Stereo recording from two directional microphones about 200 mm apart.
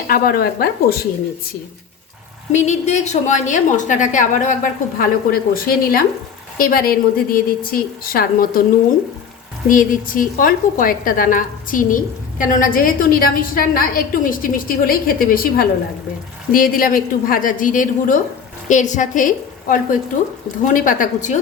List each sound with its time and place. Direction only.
0.1 s a woman's voice: 50° left (ahead or behind)
2.5 s a woman's voice: 35° left (ahead or behind)
9.6 s a woman's voice: 45° left (ahead or behind)